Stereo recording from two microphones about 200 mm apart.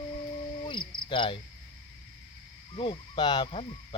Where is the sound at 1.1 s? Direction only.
25° left (ahead or behind).